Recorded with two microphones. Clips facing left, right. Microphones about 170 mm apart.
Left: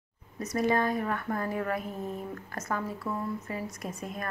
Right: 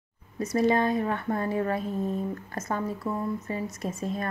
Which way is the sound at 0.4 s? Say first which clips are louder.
Right 4 dB; 25° right (ahead or behind).